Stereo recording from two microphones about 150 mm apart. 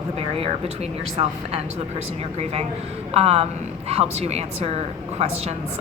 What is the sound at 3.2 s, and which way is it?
A woman's voice, 45° right (ahead or behind).